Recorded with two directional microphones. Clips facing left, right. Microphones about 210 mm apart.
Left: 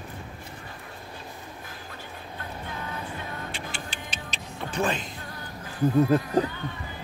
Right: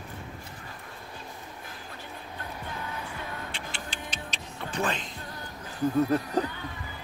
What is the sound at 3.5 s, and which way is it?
Music, 10° left (ahead or behind).